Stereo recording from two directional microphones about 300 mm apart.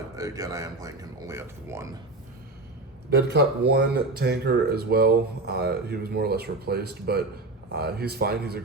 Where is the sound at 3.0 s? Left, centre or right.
Right.